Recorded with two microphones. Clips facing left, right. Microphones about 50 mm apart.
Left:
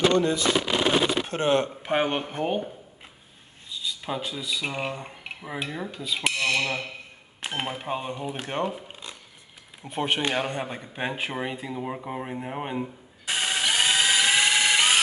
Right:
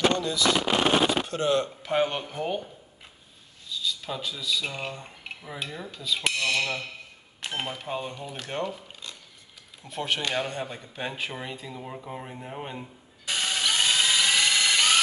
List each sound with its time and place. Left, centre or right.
0.2 s speech: left
12.8 s drill: left